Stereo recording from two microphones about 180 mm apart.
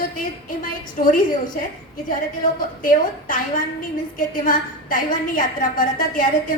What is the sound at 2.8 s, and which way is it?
A woman's voice, 50° left (ahead or behind).